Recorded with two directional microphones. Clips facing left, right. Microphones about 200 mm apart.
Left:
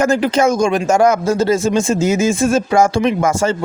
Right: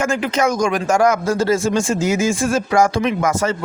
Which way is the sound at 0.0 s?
35° left (ahead or behind).